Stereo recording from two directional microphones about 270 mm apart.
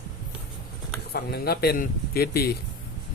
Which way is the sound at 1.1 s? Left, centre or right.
Left.